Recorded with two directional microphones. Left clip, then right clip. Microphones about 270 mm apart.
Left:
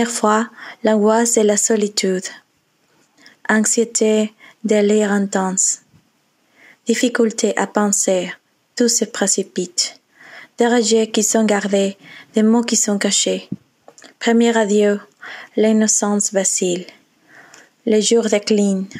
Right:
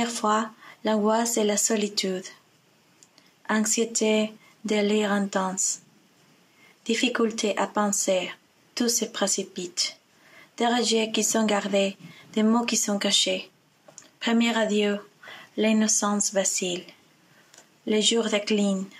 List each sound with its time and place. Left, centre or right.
0.0 s speech: left
3.4 s speech: left
6.9 s speech: left